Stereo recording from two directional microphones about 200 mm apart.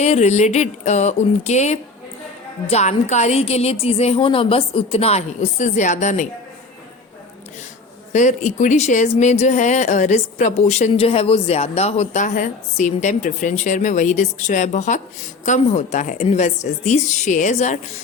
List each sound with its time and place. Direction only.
0.0 s speech: 35° left (ahead or behind)
8.1 s speech: 35° left (ahead or behind)